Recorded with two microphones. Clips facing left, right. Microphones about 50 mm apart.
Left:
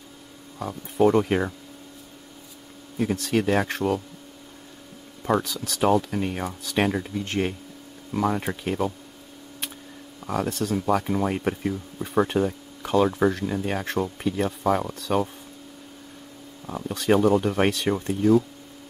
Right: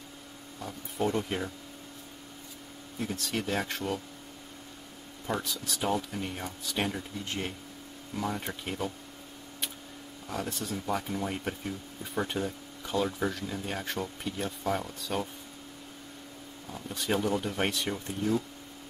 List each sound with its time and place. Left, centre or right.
0.6 s speech: left
3.0 s speech: left
5.8 s speech: left
10.2 s speech: left
11.1 s speech: left
13.9 s speech: left
16.6 s speech: left
17.1 s speech: left